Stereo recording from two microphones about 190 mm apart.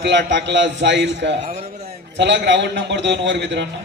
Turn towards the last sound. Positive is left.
turn(degrees=-65)  # may be behind; listen again after turning